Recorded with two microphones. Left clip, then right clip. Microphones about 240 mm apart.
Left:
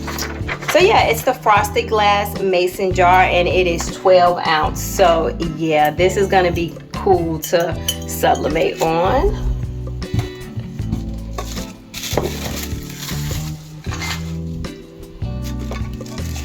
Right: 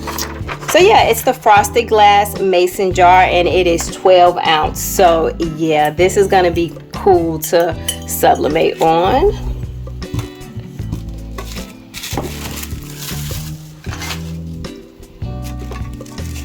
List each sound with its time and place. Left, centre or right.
0.7 s speech: right